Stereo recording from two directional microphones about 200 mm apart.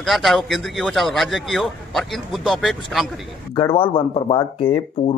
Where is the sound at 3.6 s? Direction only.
25° left (ahead or behind).